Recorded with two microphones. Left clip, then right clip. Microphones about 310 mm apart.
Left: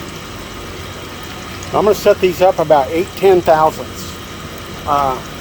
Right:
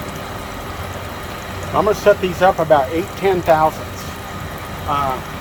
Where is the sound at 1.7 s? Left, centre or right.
Left.